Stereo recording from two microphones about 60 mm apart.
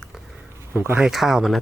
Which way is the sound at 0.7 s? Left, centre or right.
Right.